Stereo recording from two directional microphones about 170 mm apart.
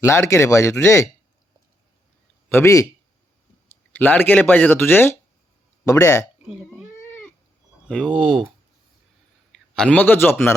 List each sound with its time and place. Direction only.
0.0 s speech: 15° left (ahead or behind)
2.5 s speech: 15° left (ahead or behind)
3.9 s speech: 10° left (ahead or behind)
6.9 s cat: 15° left (ahead or behind)
7.9 s speech: 5° left (ahead or behind)
9.7 s speech: 5° left (ahead or behind)